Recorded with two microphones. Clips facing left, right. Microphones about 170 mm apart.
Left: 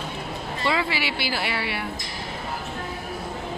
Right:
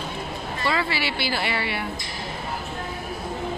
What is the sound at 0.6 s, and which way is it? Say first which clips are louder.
Speech: even; 15° left (ahead or behind).